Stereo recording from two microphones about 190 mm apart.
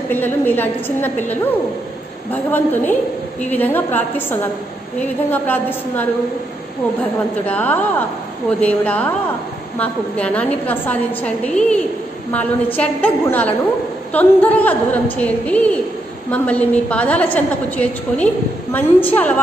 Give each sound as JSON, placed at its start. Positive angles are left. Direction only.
{"t": 0.1, "sound": "a woman's voice", "side_deg": 10}